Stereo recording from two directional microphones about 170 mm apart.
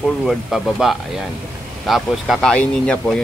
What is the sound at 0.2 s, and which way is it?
Speech, centre (ahead or behind).